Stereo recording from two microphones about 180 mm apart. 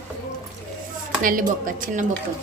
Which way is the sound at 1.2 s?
50° right (ahead or behind).